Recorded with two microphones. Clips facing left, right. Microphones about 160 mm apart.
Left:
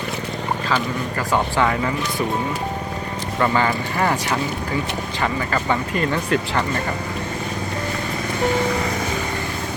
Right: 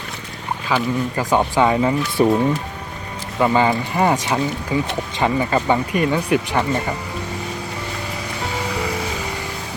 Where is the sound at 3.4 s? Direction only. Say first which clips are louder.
Right 3 dB; 20° right (ahead or behind).